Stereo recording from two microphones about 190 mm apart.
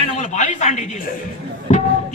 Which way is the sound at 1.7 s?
35° left (ahead or behind).